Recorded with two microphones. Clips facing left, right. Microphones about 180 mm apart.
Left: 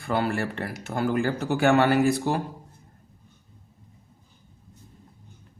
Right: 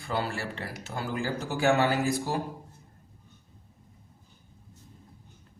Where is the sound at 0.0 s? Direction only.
55° left (ahead or behind).